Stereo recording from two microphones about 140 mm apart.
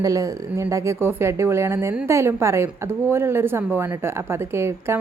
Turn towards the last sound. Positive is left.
turn(degrees=-20)  # may be behind; listen again after turning